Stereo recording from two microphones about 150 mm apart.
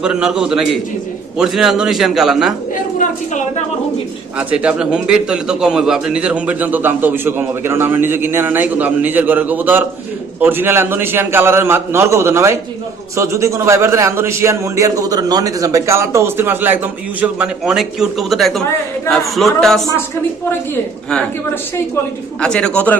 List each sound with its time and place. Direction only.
0.0 s a man's voice: 5° right (ahead or behind)
3.0 s a woman's voice: 55° left (ahead or behind)
4.4 s a man's voice: 5° right (ahead or behind)
21.1 s speech: 10° left (ahead or behind)